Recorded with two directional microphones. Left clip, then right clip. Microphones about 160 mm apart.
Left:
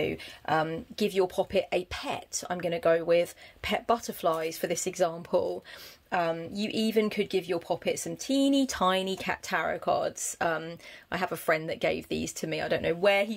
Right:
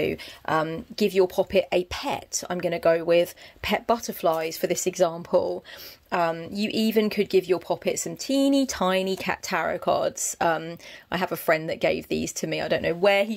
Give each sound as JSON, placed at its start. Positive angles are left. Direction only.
{"t": 0.0, "sound": "speech", "side_deg": -45}
{"t": 6.0, "sound": "speech", "side_deg": -45}